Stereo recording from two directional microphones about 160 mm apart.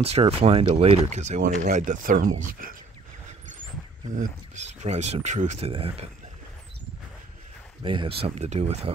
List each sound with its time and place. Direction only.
0.0 s speech: 40° right (ahead or behind)
4.1 s speech: 50° right (ahead or behind)
5.7 s speech: 35° right (ahead or behind)
7.8 s speech: 30° right (ahead or behind)